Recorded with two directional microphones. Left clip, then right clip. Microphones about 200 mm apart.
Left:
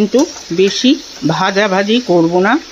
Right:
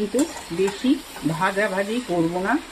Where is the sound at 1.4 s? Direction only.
50° left (ahead or behind).